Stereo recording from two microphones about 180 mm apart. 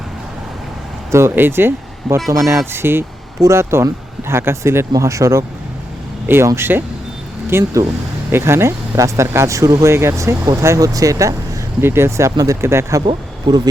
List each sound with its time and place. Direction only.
1.1 s speech: 15° right (ahead or behind)